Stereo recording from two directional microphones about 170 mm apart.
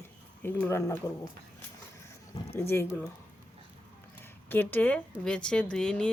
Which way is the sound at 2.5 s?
15° left (ahead or behind).